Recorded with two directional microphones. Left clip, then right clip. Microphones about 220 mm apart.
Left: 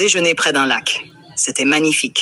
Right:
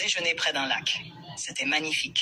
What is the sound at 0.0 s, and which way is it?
Speech, 50° left (ahead or behind).